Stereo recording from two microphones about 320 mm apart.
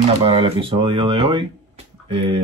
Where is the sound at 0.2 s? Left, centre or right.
Centre.